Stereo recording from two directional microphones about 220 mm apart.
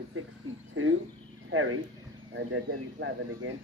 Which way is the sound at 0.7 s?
65° right (ahead or behind).